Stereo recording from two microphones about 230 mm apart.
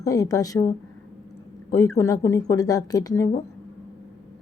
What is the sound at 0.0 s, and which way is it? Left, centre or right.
Speech, centre.